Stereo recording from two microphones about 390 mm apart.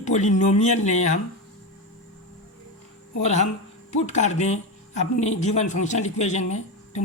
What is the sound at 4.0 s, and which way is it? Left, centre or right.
Speech, centre.